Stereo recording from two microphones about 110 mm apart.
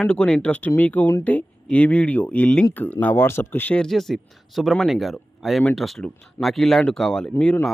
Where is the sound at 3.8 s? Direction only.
Centre (ahead or behind).